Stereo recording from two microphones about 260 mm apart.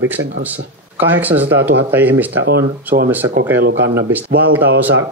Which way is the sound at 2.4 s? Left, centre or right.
Right.